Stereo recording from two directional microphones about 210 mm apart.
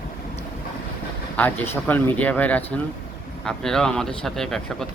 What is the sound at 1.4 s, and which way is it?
Speech, 5° left (ahead or behind).